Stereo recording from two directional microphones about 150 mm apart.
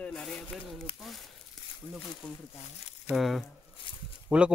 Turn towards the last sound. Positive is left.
turn(degrees=-5)  # may be behind; listen again after turning